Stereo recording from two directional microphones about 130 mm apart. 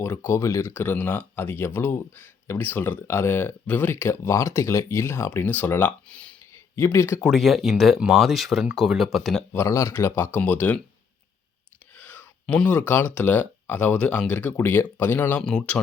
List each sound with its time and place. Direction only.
0.0 s speech: 20° left (ahead or behind)
6.5 s a sound: 20° left (ahead or behind)
7.2 s speech: centre (ahead or behind)
9.5 s speech: 20° left (ahead or behind)
11.9 s speech: 15° left (ahead or behind)